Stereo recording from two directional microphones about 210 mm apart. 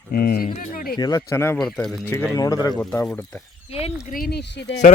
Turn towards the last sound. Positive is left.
turn(degrees=55)  # may be behind; listen again after turning